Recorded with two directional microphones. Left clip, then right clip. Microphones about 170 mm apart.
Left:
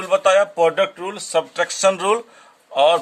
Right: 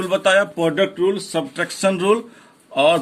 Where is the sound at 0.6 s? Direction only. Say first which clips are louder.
Right 1 dB; 45° left (ahead or behind).